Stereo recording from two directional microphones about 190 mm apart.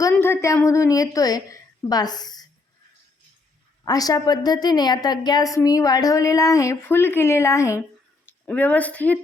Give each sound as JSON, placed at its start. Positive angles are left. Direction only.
{"t": 0.1, "sound": "a woman's voice", "side_deg": 10}
{"t": 3.8, "sound": "a woman's voice", "side_deg": 20}